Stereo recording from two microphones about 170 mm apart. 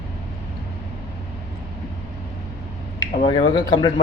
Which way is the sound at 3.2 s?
30° left (ahead or behind).